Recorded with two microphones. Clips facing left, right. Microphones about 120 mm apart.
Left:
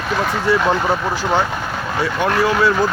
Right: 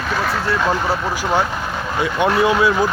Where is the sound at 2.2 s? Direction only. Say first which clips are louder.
Right 1 dB; 20° right (ahead or behind).